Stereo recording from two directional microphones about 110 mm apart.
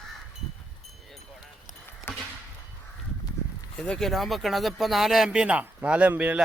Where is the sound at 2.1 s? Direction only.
20° left (ahead or behind).